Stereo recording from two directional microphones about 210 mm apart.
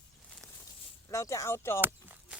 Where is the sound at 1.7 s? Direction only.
10° right (ahead or behind).